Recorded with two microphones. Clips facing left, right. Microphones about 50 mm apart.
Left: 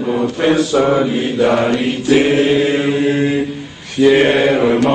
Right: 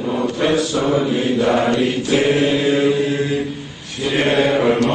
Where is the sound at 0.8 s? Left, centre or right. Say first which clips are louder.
Left 4 dB; left.